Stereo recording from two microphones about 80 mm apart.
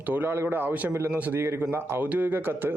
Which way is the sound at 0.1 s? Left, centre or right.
Right.